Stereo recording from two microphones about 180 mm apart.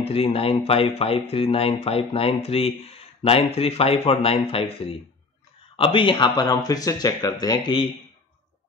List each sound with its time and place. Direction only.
0.0 s speech: 35° left (ahead or behind)